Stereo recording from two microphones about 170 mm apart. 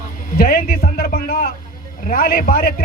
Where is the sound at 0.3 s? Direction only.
60° left (ahead or behind).